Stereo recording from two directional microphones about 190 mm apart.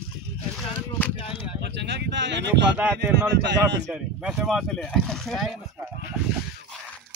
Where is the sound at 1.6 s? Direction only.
65° right (ahead or behind).